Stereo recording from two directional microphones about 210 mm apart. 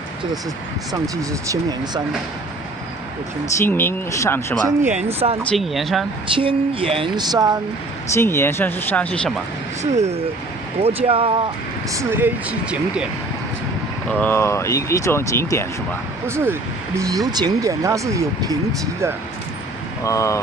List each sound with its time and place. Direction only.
1.0 s speech: 15° right (ahead or behind)
3.6 s speech: 10° left (ahead or behind)
4.9 s speech: 30° right (ahead or behind)
5.4 s speech: centre (ahead or behind)
6.3 s speech: 25° right (ahead or behind)
8.1 s speech: 15° left (ahead or behind)
9.8 s speech: 30° right (ahead or behind)
11.9 s speech: 10° right (ahead or behind)
14.1 s speech: 10° left (ahead or behind)
16.2 s speech: 10° right (ahead or behind)
20.1 s speech: 15° left (ahead or behind)